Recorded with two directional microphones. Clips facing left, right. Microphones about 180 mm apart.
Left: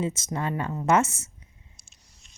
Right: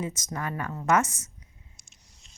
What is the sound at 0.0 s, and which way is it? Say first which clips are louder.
Speech: left 4 dB; 25° left (ahead or behind).